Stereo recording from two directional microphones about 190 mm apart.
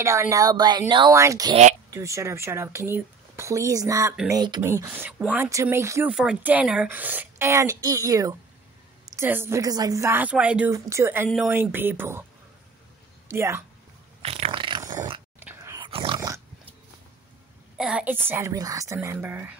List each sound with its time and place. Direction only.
0.0 s a woman's voice: 15° right (ahead or behind)
4.6 s speech: 10° right (ahead or behind)
13.3 s speech: 15° right (ahead or behind)
14.2 s a woman's voice: 35° right (ahead or behind)
15.4 s a sound: 15° right (ahead or behind)
15.9 s dog: 30° right (ahead or behind)
17.7 s speech: 5° right (ahead or behind)